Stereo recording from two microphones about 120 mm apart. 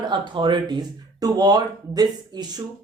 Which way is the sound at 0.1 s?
40° right (ahead or behind).